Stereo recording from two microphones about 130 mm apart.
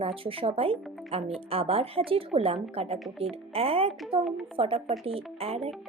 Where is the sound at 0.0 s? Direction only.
45° right (ahead or behind).